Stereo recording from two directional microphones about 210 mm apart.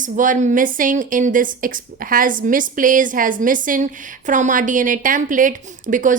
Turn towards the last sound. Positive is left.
turn(degrees=-40)  # may be behind; listen again after turning